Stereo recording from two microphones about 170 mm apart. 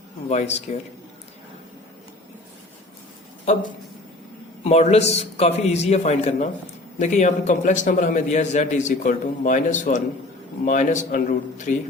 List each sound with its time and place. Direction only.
0.3 s a man's voice: 40° left (ahead or behind)
4.6 s a man's voice: 40° left (ahead or behind)